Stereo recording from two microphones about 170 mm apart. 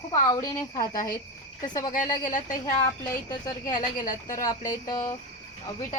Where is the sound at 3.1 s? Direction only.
20° left (ahead or behind).